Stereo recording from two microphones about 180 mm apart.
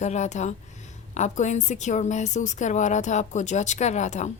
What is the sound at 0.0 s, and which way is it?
A woman's voice, 40° left (ahead or behind).